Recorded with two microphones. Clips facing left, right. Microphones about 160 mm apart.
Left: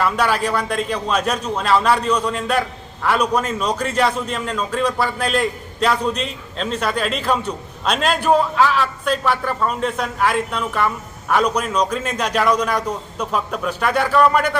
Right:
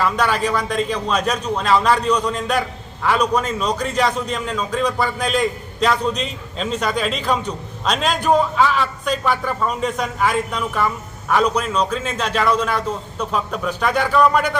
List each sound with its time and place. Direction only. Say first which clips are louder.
0.0 s a man's voice: even; 5° left (ahead or behind)